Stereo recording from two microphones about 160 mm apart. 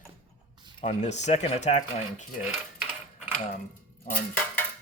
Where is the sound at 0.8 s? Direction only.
45° left (ahead or behind).